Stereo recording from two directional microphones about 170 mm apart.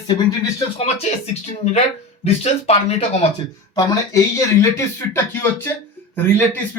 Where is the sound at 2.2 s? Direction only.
40° left (ahead or behind).